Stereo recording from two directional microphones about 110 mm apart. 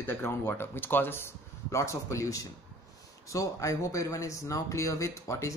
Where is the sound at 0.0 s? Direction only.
20° left (ahead or behind).